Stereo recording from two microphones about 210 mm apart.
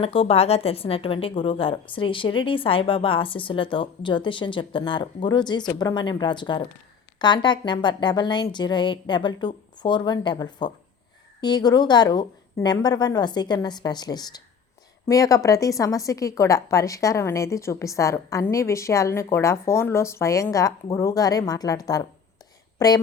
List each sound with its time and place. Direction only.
0.0 s a woman's voice: 25° left (ahead or behind)